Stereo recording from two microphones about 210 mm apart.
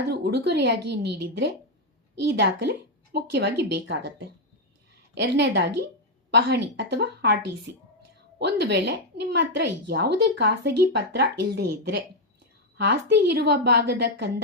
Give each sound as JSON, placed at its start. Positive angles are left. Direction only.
{"t": 0.1, "sound": "a woman's voice", "side_deg": -50}
{"t": 5.1, "sound": "a woman's voice", "side_deg": -55}